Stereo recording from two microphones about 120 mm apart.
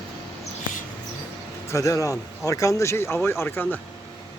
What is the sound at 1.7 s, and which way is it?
Speech, 25° left (ahead or behind).